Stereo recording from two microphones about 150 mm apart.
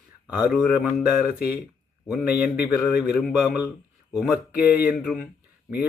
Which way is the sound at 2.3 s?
90° left.